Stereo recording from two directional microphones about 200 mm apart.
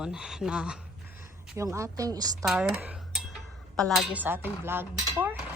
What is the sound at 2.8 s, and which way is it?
Dishes, 5° right (ahead or behind).